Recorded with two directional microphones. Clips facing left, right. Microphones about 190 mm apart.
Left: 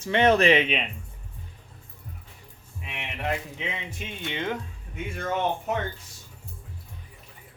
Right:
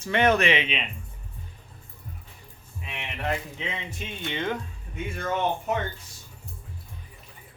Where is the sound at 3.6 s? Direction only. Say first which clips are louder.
Even; 10° left (ahead or behind).